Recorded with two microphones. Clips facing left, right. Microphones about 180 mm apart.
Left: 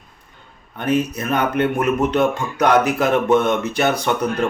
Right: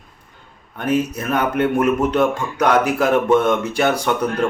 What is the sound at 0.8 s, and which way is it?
Speech, 5° right (ahead or behind).